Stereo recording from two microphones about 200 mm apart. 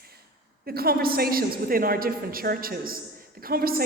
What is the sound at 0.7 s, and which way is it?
A woman's voice, 50° right (ahead or behind).